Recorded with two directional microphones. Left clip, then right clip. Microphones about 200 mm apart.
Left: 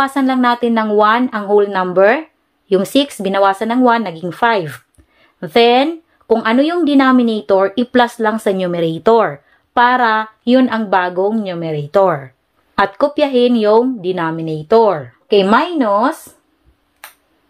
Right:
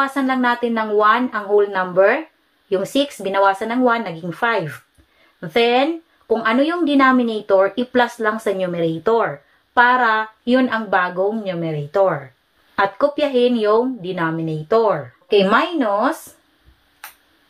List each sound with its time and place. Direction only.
0.0 s a woman's voice: 45° left (ahead or behind)